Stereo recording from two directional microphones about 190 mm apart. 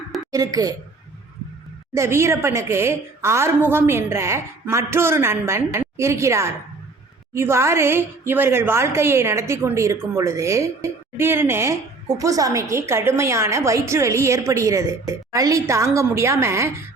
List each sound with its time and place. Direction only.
0.3 s a woman's voice: 20° right (ahead or behind)
1.9 s a woman's voice: 15° right (ahead or behind)